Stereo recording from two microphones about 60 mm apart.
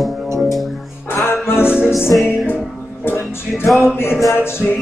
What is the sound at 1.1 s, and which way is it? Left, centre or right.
Music, left.